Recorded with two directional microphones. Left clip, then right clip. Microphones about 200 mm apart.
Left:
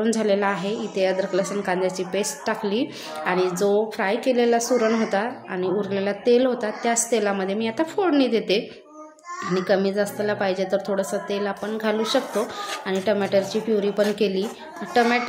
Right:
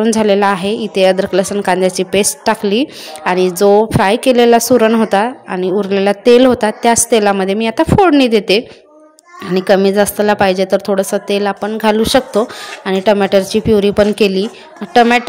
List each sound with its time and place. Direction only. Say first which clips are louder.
0.0 s a woman's voice: right 10 dB; 40° right (ahead or behind)